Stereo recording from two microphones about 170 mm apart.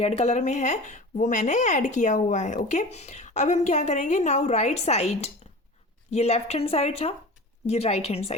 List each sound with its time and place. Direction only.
0.0 s a woman's voice: 40° left (ahead or behind)